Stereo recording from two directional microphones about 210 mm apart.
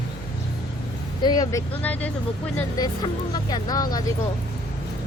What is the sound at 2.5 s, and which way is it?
Speech, 20° left (ahead or behind).